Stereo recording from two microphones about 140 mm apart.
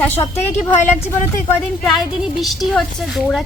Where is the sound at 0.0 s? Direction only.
15° left (ahead or behind).